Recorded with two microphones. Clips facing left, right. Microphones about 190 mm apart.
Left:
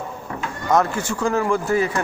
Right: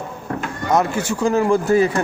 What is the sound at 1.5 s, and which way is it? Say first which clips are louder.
Speech: right 4 dB; 35° right (ahead or behind).